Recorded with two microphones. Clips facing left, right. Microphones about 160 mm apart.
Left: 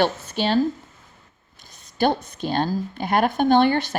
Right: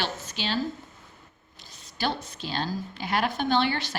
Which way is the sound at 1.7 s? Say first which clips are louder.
Left 9 dB; 50° left (ahead or behind).